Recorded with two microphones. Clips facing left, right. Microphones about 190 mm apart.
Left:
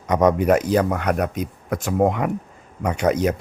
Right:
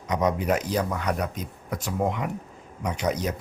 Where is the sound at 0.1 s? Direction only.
55° left (ahead or behind).